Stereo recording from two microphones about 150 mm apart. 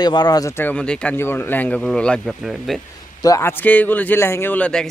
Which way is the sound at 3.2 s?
20° left (ahead or behind).